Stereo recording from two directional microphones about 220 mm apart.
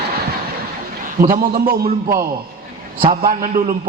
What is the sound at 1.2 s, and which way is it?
A man's voice, 40° right (ahead or behind).